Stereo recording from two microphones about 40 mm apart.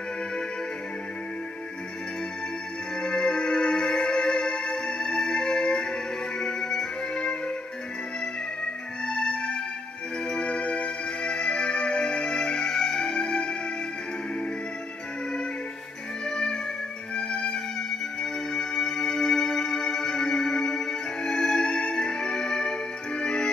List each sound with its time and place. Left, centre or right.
3.0 s music: left
9.0 s music: centre
16.3 s music: centre